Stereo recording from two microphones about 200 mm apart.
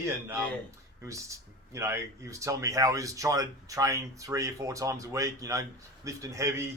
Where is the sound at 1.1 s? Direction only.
15° right (ahead or behind).